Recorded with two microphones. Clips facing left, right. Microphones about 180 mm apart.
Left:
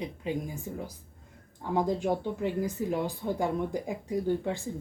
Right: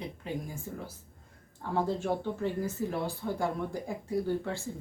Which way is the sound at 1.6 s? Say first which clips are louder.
Left 3 dB; 15° left (ahead or behind).